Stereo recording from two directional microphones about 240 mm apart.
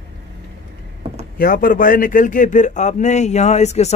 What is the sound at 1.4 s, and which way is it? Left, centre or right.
Speech, left.